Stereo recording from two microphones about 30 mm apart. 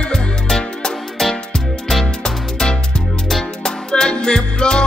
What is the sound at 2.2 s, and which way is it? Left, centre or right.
Music, left.